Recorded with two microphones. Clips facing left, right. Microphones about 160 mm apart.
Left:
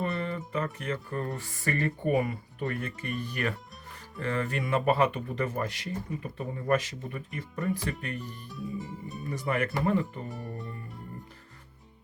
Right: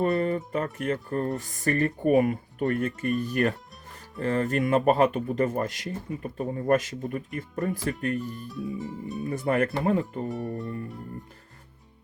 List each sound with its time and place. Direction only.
0.0 s speech: 50° right (ahead or behind)
8.4 s music: centre (ahead or behind)
9.3 s speech: 50° right (ahead or behind)
10.2 s music: centre (ahead or behind)